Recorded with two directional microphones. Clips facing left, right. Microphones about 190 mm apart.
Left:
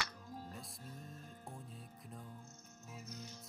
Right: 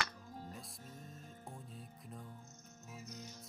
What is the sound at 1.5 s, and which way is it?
Music, centre (ahead or behind).